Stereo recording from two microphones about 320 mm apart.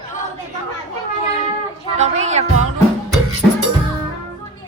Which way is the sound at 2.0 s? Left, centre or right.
Right.